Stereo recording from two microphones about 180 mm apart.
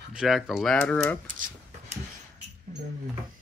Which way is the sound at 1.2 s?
45° right (ahead or behind).